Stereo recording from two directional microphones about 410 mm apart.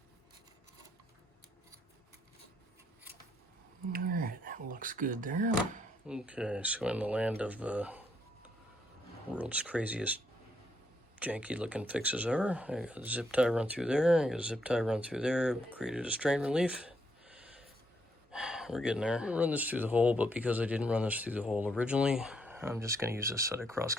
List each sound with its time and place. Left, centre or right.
3.9 s a sound: right
6.1 s speech: centre
9.3 s speech: centre
11.2 s speech: centre